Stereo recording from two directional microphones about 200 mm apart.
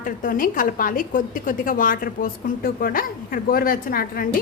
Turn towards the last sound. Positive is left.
turn(degrees=45)  # may be behind; listen again after turning